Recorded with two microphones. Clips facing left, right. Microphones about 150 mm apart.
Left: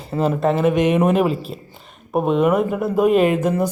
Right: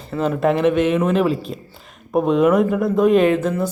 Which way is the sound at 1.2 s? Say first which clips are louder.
Right 1 dB; 5° left (ahead or behind).